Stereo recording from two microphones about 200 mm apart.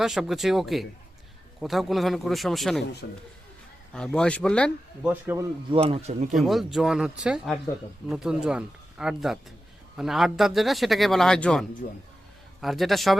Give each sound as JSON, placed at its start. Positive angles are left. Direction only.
{"t": 0.0, "sound": "speech", "side_deg": 0}
{"t": 3.0, "sound": "a man's voice", "side_deg": 60}
{"t": 3.9, "sound": "speech", "side_deg": 5}
{"t": 5.0, "sound": "speech", "side_deg": -10}
{"t": 5.7, "sound": "speech", "side_deg": -30}
{"t": 6.3, "sound": "speech", "side_deg": 0}
{"t": 11.8, "sound": "a man's voice", "side_deg": 45}
{"t": 12.6, "sound": "speech", "side_deg": 0}